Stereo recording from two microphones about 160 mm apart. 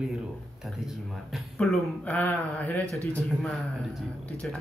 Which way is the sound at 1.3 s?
Centre (ahead or behind).